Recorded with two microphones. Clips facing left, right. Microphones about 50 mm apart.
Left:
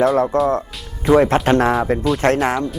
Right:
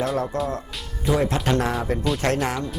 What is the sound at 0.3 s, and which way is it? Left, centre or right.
Speech, left.